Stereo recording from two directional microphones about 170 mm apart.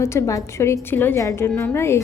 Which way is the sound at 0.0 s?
15° left (ahead or behind).